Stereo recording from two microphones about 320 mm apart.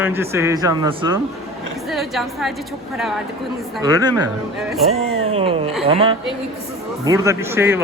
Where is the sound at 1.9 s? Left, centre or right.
Centre.